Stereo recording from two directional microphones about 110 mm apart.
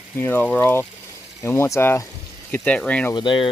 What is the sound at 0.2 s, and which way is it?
Speech, 15° left (ahead or behind).